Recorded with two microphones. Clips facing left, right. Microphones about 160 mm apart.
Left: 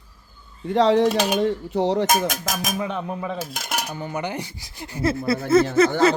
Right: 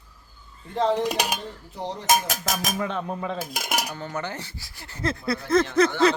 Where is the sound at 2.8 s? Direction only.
10° left (ahead or behind).